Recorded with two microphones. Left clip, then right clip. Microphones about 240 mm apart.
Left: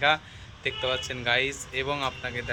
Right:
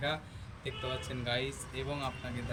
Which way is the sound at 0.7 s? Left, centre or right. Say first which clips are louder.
Left 11 dB; centre.